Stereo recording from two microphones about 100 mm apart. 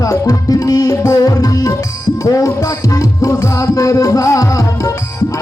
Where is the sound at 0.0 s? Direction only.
35° left (ahead or behind).